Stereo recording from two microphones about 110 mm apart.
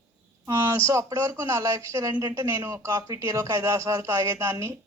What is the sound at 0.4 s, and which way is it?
A woman's voice, 30° right (ahead or behind).